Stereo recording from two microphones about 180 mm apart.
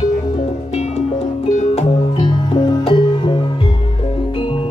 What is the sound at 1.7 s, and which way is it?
Music, 30° left (ahead or behind).